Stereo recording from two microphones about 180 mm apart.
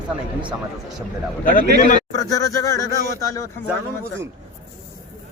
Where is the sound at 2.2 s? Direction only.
20° left (ahead or behind).